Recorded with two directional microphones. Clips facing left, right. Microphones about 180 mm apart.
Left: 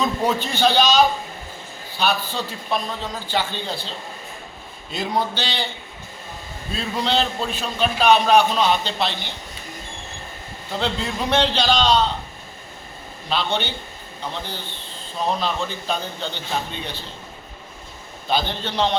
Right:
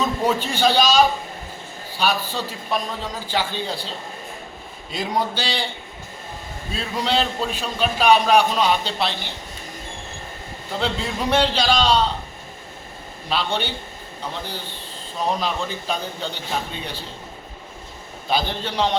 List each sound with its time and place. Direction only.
0.0 s a man's voice: 10° right (ahead or behind)
4.9 s a man's voice: 10° right (ahead or behind)
6.7 s a man's voice: 10° right (ahead or behind)
10.8 s a man's voice: 5° right (ahead or behind)
13.3 s a man's voice: 10° right (ahead or behind)
15.4 s a man's voice: 10° right (ahead or behind)
18.3 s a man's voice: 10° right (ahead or behind)